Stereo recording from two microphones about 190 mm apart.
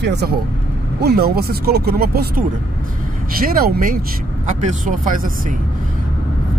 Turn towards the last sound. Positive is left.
turn(degrees=-45)  # may be behind; listen again after turning